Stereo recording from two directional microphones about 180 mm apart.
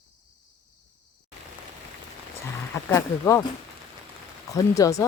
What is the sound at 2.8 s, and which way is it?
Speech, 20° left (ahead or behind).